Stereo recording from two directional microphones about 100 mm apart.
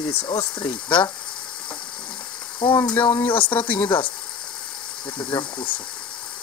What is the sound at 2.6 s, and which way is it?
Speech, 55° left (ahead or behind).